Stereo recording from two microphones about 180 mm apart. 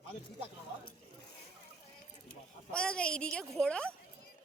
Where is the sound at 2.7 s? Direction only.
5° left (ahead or behind).